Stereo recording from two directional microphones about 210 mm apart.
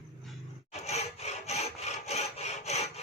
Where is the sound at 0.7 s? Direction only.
30° left (ahead or behind).